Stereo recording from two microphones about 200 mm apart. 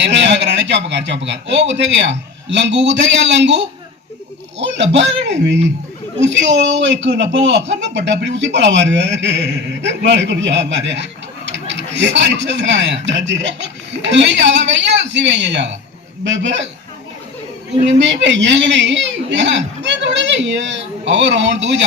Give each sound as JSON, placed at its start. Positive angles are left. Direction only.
{"t": 0.0, "sound": "a man's voice", "side_deg": -60}
{"t": 4.6, "sound": "a man's voice", "side_deg": -65}
{"t": 17.9, "sound": "a man's voice", "side_deg": -65}